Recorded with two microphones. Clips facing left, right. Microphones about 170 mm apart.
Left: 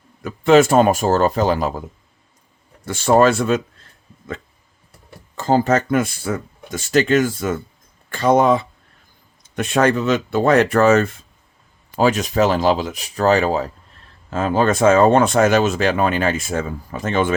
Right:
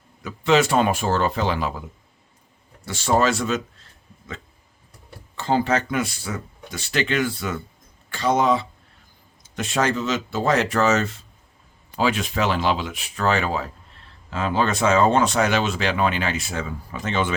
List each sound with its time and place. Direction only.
0.2 s speech: 50° left (ahead or behind)
2.8 s speech: 50° left (ahead or behind)
5.4 s speech: 40° left (ahead or behind)
11.9 s speech: 45° left (ahead or behind)